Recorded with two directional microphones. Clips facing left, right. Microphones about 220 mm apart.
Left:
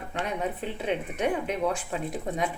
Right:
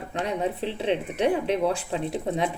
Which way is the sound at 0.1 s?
30° right (ahead or behind).